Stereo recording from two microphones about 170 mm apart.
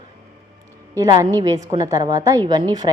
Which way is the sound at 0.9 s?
20° right (ahead or behind).